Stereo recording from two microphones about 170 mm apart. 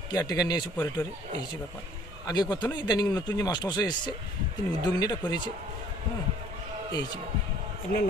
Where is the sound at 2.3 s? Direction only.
25° left (ahead or behind).